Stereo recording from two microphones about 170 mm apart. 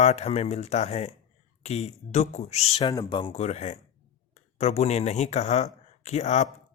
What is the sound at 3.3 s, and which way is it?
Speech, 40° left (ahead or behind).